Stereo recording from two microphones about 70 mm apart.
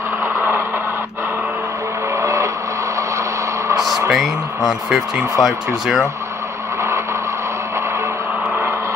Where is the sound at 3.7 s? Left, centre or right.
Right.